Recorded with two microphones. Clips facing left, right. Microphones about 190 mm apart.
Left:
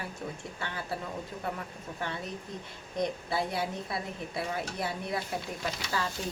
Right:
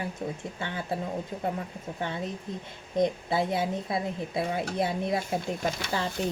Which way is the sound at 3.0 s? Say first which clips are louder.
Right 4 dB; 20° right (ahead or behind).